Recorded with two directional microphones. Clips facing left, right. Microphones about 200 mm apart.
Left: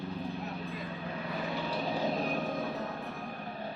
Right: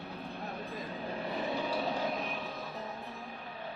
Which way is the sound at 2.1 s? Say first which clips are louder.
Left 6 dB; 45° left (ahead or behind).